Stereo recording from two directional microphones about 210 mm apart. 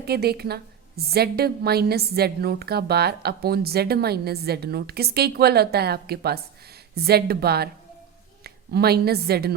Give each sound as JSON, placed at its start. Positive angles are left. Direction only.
{"t": 0.0, "sound": "a woman's voice", "side_deg": -50}